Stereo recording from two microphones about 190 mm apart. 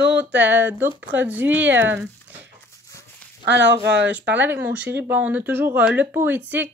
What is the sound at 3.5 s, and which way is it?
Speech, 70° right (ahead or behind).